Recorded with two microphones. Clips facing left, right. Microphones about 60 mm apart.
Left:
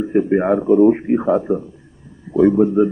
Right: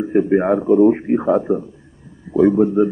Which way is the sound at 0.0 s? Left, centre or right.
Centre.